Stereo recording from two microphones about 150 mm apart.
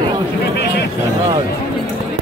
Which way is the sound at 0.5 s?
90° left.